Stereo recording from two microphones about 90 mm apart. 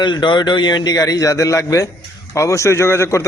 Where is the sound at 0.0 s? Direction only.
60° left (ahead or behind).